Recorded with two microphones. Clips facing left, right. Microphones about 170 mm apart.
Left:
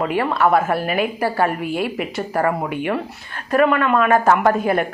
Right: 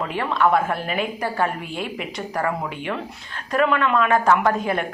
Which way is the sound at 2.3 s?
55° left (ahead or behind).